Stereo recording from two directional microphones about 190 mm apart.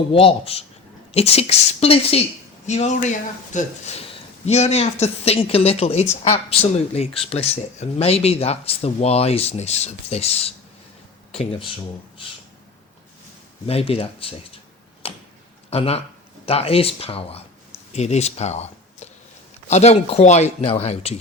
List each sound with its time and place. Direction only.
0.1 s speech: 30° left (ahead or behind)
13.7 s speech: 30° left (ahead or behind)
15.0 s tick-tock: 30° left (ahead or behind)
15.7 s speech: 30° left (ahead or behind)